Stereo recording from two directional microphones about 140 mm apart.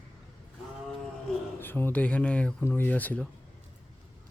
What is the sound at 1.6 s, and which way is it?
Speech, 15° left (ahead or behind).